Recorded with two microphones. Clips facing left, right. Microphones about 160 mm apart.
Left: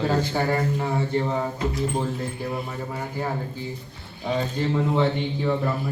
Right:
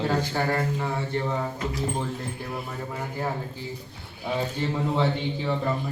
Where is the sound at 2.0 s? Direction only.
Centre (ahead or behind).